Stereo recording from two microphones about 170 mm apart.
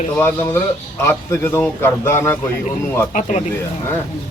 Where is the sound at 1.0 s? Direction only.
15° left (ahead or behind).